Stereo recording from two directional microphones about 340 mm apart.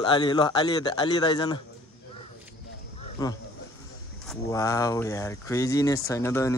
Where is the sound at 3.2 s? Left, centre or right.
Centre.